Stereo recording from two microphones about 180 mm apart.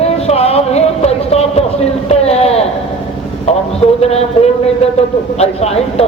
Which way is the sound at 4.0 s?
35° left (ahead or behind).